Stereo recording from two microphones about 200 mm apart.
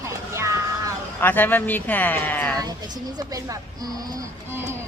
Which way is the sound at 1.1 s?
10° left (ahead or behind).